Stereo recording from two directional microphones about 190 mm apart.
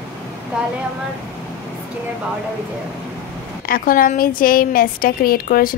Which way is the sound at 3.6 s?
50° left (ahead or behind).